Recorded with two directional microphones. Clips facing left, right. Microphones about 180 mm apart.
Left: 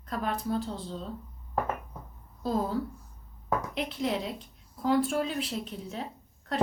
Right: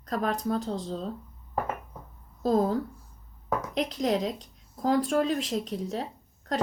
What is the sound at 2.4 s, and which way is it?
Speech, 45° right (ahead or behind).